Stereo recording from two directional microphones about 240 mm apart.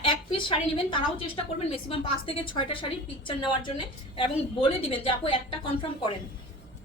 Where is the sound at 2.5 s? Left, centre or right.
Left.